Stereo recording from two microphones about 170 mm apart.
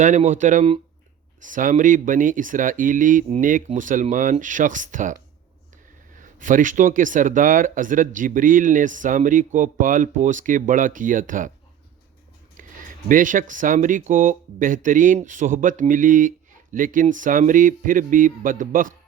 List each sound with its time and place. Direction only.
0.0 s speech: 45° right (ahead or behind)
13.1 s speech: 50° right (ahead or behind)